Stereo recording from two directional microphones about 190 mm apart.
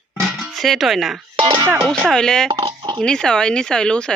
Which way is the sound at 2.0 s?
5° left (ahead or behind).